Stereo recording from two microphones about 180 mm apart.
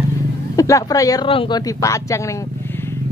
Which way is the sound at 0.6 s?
20° left (ahead or behind).